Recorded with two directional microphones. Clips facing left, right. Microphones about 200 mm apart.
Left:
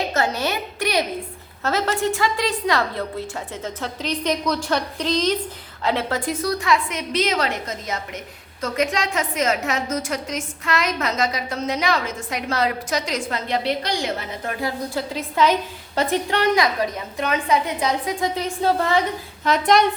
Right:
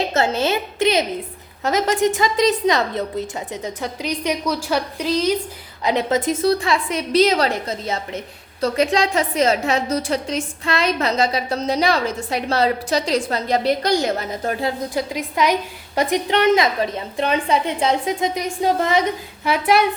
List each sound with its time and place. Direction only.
0.1 s a woman's voice: 25° right (ahead or behind); by 14.5 s 40° right (ahead or behind)
14.6 s a woman's voice: 15° right (ahead or behind)